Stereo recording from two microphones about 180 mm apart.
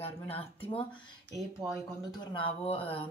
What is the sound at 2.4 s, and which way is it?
Speech, 30° left (ahead or behind).